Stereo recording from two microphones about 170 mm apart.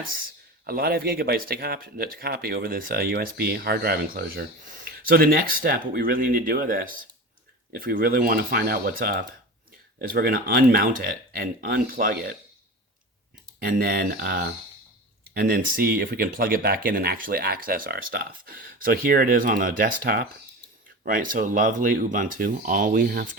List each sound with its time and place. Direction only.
0.6 s speech: 65° right (ahead or behind)
13.6 s speech: 60° right (ahead or behind)